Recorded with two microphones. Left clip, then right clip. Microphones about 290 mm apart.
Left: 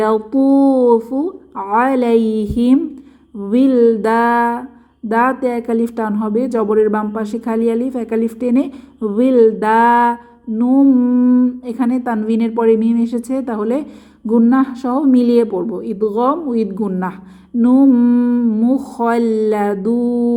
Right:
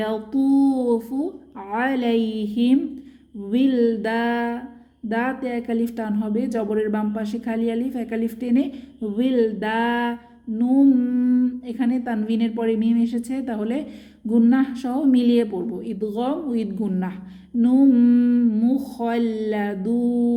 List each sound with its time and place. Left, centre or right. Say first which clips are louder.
0.0 s a woman's voice: left 9 dB; centre
18.3 s humming: left 4 dB; left
18.5 s a woman's voice: left 6 dB; centre